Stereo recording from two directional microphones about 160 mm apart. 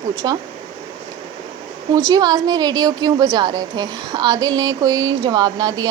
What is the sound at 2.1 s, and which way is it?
A woman's voice, 25° right (ahead or behind).